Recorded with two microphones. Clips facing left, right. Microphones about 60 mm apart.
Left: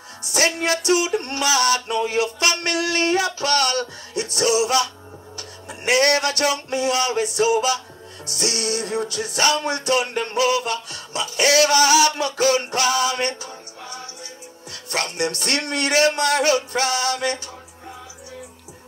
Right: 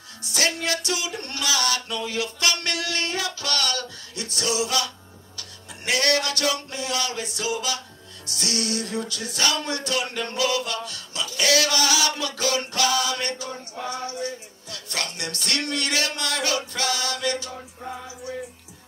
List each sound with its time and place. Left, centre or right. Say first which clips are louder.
0.2 s music: left 4 dB; left
13.8 s music: right 8 dB; right
14.7 s music: left 5 dB; left